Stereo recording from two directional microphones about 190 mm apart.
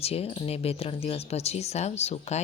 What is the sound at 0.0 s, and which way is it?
Speech, 30° left (ahead or behind).